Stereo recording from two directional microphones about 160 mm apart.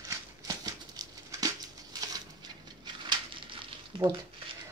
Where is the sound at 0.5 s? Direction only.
20° right (ahead or behind).